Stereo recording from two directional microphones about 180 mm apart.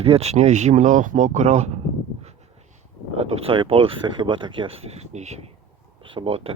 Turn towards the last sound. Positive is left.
turn(degrees=-35)  # may be behind; listen again after turning